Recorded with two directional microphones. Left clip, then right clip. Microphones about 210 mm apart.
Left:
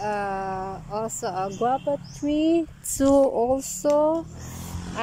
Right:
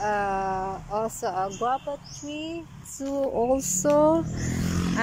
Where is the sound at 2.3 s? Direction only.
35° left (ahead or behind).